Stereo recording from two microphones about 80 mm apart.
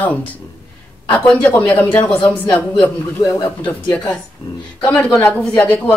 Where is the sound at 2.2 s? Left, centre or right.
Left.